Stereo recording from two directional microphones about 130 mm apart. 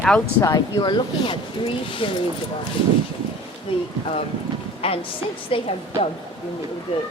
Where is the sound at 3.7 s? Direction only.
45° left (ahead or behind).